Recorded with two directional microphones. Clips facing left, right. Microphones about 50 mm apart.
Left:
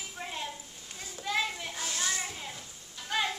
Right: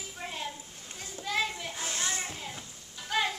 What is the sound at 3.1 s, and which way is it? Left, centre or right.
Music, centre.